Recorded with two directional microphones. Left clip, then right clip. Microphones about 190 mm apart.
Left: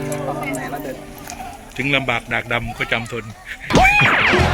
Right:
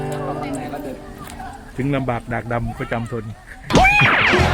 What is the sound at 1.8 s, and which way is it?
Speech, 25° right (ahead or behind).